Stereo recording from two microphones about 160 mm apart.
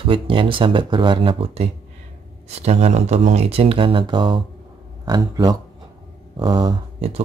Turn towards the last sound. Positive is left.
turn(degrees=-35)  # may be behind; listen again after turning